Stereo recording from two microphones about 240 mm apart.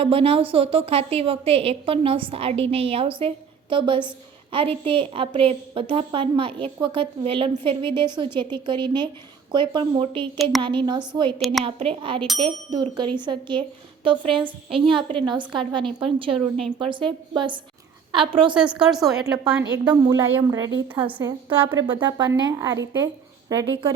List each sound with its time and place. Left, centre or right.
0.0 s a woman's voice: right
11.3 s speech: centre
11.6 s a woman's voice: right
18.5 s speech: centre
19.7 s a woman's voice: centre